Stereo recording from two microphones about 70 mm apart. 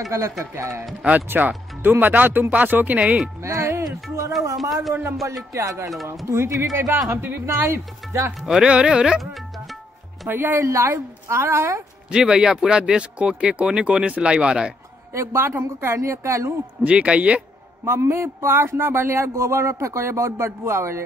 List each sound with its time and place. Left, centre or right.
0.1 s a woman's voice: right
1.0 s speech: right
3.8 s speech: right
4.6 s speech: centre
5.5 s a woman's voice: right
6.9 s speech: right
8.4 s speech: centre
9.2 s music: centre
10.2 s speech: right
10.6 s a woman's voice: right
12.1 s speech: centre
15.1 s speech: right
16.8 s speech: centre
17.8 s speech: right